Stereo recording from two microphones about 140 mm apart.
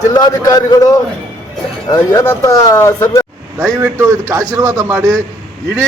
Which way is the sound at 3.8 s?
20° right (ahead or behind).